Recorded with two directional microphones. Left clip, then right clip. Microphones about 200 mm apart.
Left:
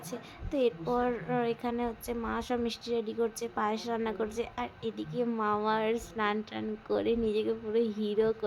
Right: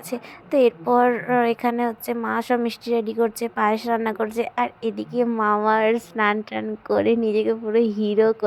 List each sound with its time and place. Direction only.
0.1 s a woman's voice: 25° right (ahead or behind)